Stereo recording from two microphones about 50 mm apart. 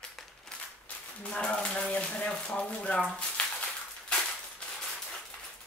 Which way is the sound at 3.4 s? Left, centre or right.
Left.